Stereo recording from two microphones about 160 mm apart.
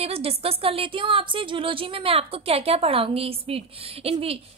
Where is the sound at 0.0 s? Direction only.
40° right (ahead or behind).